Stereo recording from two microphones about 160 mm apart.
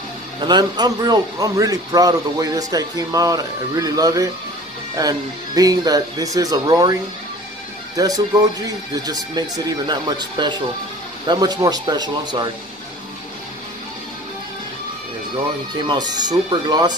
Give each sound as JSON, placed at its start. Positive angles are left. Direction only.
{"t": 0.4, "sound": "speech", "side_deg": -25}
{"t": 7.9, "sound": "speech", "side_deg": -20}
{"t": 15.9, "sound": "speech", "side_deg": -25}